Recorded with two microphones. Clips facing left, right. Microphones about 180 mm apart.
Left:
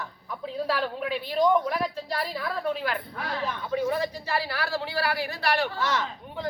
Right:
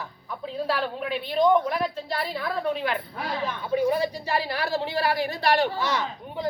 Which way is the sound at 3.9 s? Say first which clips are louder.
Right 3 dB; 15° right (ahead or behind).